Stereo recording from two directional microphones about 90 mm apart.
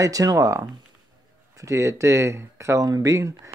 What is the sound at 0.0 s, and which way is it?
Speech, 40° right (ahead or behind).